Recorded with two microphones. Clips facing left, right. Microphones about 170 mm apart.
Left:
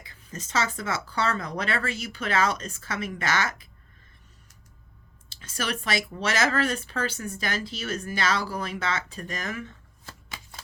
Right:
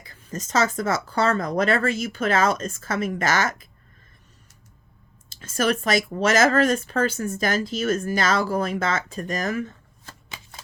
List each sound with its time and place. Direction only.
0.0 s speech: 45° right (ahead or behind)
5.4 s speech: 45° right (ahead or behind)